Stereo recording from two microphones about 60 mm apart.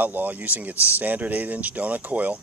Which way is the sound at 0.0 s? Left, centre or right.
Right.